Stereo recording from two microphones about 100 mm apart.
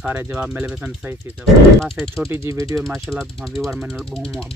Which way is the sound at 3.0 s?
5° left (ahead or behind).